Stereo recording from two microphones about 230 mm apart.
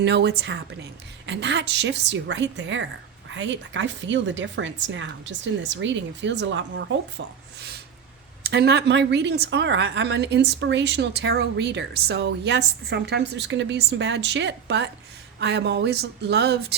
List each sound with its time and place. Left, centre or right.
0.0 s a woman's voice: right
8.4 s a woman's voice: right